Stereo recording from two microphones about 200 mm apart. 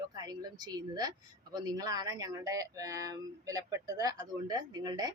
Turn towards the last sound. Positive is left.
turn(degrees=-20)  # may be behind; listen again after turning